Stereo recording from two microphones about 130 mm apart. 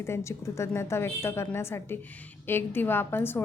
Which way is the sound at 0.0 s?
20° left (ahead or behind).